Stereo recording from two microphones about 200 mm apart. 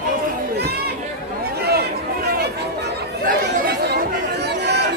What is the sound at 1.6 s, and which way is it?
Chatter, 50° right (ahead or behind).